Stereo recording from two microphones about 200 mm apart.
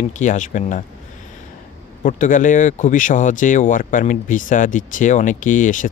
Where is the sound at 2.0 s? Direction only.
40° left (ahead or behind).